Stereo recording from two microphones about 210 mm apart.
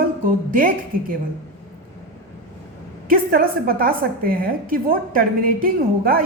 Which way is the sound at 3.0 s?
45° right (ahead or behind).